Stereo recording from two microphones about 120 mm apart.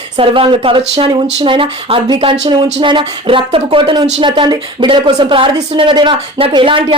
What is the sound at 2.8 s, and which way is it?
Speech, 40° right (ahead or behind).